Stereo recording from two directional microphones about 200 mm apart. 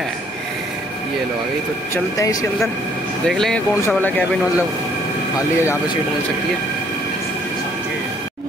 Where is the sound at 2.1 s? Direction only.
15° left (ahead or behind).